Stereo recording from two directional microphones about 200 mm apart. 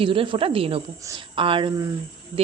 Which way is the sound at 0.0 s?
25° right (ahead or behind).